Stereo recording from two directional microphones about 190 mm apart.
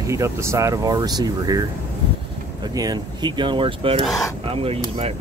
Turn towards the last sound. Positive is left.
turn(degrees=-30)  # may be behind; listen again after turning